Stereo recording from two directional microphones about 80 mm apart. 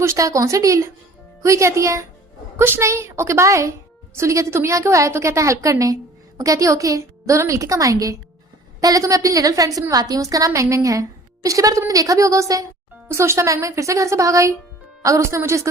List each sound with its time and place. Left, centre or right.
0.0 s a woman's voice: right
2.6 s a woman's voice: right